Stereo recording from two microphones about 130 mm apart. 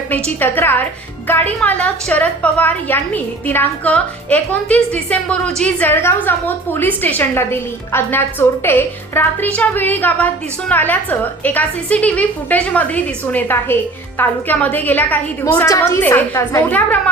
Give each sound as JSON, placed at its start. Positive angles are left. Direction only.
{"t": 0.3, "sound": "a woman's voice", "side_deg": 15}